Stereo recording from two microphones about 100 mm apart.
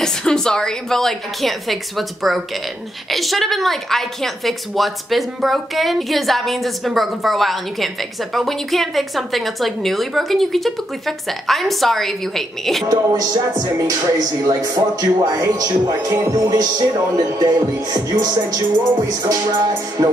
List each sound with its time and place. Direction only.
0.0 s a woman's voice: 5° left (ahead or behind)
12.8 s speech: 40° right (ahead or behind)